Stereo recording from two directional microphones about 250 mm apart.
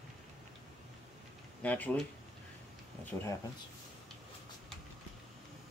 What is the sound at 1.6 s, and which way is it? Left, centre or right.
Speech, centre.